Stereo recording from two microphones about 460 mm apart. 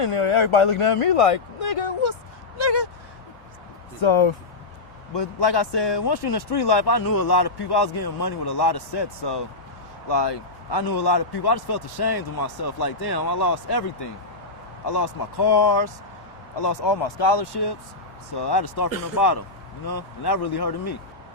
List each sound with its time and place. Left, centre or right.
0.0 s speech: left
2.6 s a sound: left
4.0 s speech: left
5.1 s a man's voice: left